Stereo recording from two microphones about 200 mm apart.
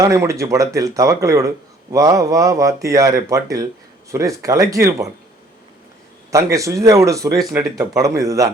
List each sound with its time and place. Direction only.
0.0 s speech: 15° right (ahead or behind)
6.3 s speech: 15° right (ahead or behind)